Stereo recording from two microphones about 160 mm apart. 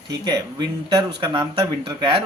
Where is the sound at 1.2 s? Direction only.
30° right (ahead or behind).